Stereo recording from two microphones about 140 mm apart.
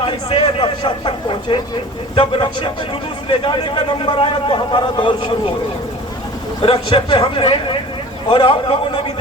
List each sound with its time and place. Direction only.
0.0 s a sound: 35° left (ahead or behind)
2.1 s a man's voice: 40° left (ahead or behind)
6.6 s a man's voice: 40° left (ahead or behind)